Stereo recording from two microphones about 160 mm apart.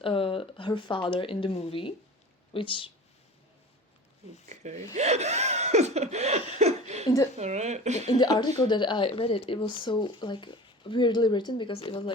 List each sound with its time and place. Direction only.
0.0 s speech: 35° left (ahead or behind)
4.4 s speech: 45° right (ahead or behind)
4.9 s laughter: 45° right (ahead or behind)
7.3 s speech: 45° right (ahead or behind)
8.0 s speech: 25° left (ahead or behind)